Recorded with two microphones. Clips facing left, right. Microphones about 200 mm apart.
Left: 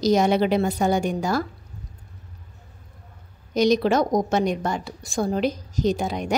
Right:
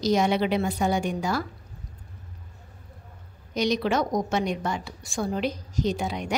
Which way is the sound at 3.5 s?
40° left (ahead or behind).